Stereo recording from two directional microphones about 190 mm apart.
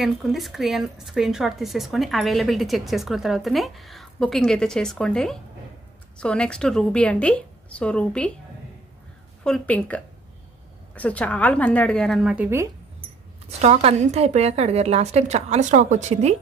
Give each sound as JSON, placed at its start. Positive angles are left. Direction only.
{"t": 0.0, "sound": "speech", "side_deg": 0}
{"t": 9.4, "sound": "speech", "side_deg": 5}
{"t": 13.6, "sound": "a woman's voice", "side_deg": -35}